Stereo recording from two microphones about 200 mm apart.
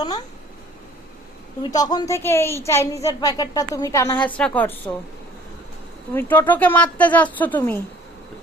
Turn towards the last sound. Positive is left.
turn(degrees=10)  # may be behind; listen again after turning